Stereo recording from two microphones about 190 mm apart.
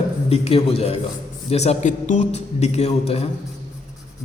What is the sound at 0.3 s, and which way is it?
A man's voice, 30° left (ahead or behind).